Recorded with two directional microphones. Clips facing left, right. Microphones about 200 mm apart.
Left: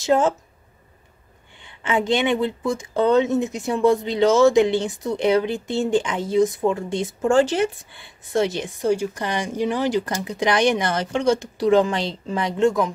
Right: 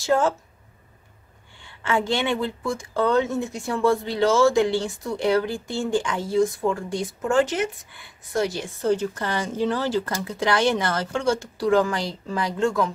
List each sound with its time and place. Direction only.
0.0 s speech: 20° left (ahead or behind)
1.8 s speech: 20° left (ahead or behind)